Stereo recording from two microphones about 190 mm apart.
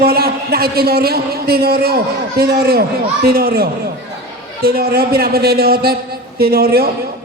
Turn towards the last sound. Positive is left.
turn(degrees=-55)  # may be behind; listen again after turning